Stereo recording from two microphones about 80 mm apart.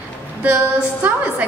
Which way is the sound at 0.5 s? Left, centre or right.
Right.